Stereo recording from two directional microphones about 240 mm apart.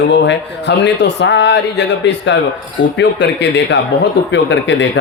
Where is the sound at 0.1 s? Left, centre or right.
Left.